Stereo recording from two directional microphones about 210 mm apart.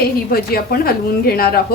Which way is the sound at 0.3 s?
45° left (ahead or behind).